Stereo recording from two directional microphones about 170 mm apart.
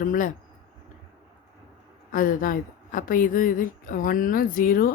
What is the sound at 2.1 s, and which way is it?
Speech, 55° left (ahead or behind).